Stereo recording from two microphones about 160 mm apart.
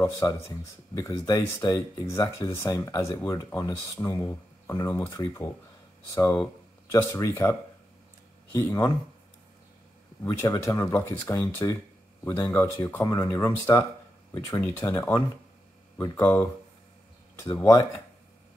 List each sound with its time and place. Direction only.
0.0 s speech: 20° left (ahead or behind)
8.5 s speech: 20° left (ahead or behind)
10.2 s speech: 20° left (ahead or behind)